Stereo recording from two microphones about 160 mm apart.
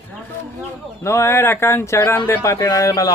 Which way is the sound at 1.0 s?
15° left (ahead or behind).